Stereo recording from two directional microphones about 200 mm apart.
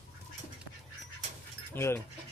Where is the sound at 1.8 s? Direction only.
10° left (ahead or behind).